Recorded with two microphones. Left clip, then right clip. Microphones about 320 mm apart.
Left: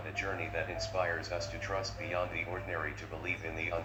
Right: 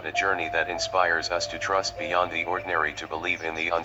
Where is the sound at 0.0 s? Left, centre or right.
Right.